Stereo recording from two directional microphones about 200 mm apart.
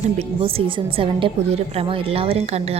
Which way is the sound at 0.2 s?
30° right (ahead or behind).